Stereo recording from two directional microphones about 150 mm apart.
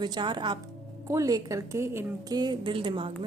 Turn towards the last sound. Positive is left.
turn(degrees=-35)  # may be behind; listen again after turning